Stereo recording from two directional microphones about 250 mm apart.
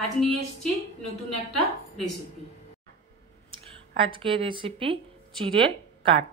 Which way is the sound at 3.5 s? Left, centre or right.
Right.